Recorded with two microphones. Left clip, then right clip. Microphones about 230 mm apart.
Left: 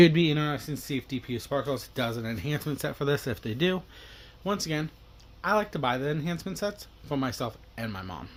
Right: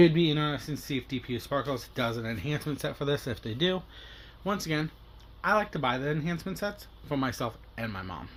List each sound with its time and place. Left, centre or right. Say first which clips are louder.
0.0 s speech: left 2 dB; left